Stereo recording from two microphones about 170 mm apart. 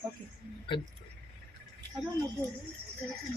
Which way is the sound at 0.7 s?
25° left (ahead or behind).